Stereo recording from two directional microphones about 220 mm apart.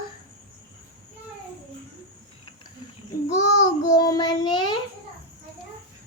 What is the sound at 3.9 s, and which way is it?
Child singing, 15° left (ahead or behind).